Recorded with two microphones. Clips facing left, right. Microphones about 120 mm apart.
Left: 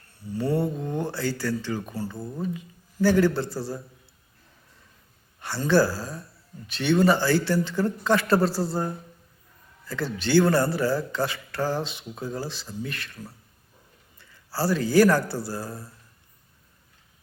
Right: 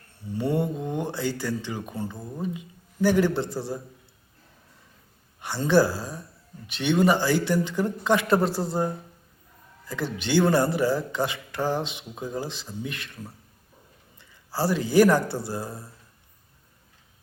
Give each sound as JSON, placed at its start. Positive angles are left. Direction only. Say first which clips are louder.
{"t": 0.3, "sound": "speech", "louder": "even", "side_deg": -20}
{"t": 5.4, "sound": "speech", "louder": "right 1 dB", "side_deg": -20}
{"t": 14.2, "sound": "a man's voice", "louder": "right 1 dB", "side_deg": -20}